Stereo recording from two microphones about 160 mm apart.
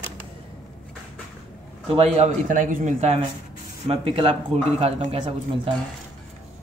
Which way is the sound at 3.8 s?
35° right (ahead or behind).